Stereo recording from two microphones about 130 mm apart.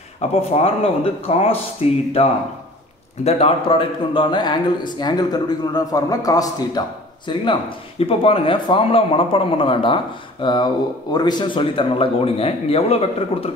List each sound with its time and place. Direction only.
0.2 s speech: 50° left (ahead or behind)
3.3 s a man's voice: 50° left (ahead or behind); by 6.8 s 25° left (ahead or behind)
7.3 s a man's voice: 35° left (ahead or behind)